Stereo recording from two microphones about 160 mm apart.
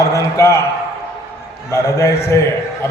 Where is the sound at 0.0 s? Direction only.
20° left (ahead or behind).